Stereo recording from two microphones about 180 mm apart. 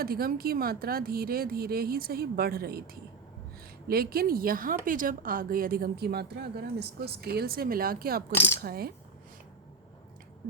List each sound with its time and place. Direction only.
0.0 s a woman's voice: 55° right (ahead or behind)